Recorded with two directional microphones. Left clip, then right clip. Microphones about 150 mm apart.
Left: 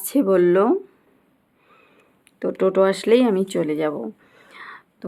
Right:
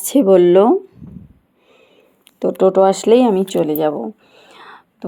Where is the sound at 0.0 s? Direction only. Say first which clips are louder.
Right 7 dB; 25° right (ahead or behind).